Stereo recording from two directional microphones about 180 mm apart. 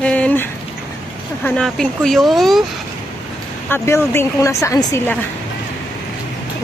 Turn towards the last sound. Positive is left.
turn(degrees=15)  # may be behind; listen again after turning